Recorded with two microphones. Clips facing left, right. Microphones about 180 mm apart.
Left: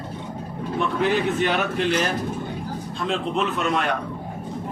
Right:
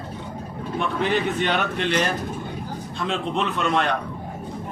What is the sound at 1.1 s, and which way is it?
Speech, 5° left (ahead or behind).